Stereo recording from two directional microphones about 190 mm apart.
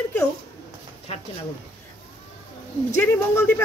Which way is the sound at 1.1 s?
30° left (ahead or behind).